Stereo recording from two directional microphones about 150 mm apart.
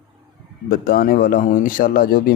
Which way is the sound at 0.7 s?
75° left (ahead or behind).